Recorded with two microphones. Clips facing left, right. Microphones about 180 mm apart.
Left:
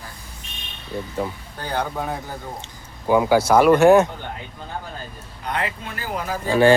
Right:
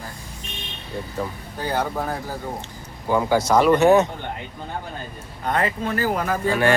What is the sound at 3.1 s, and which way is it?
Speech, 10° left (ahead or behind).